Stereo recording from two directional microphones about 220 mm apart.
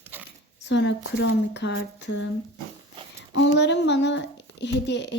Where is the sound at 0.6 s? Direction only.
55° left (ahead or behind).